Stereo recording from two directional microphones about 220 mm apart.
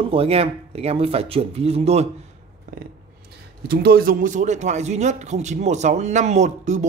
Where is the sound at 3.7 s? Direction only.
45° right (ahead or behind).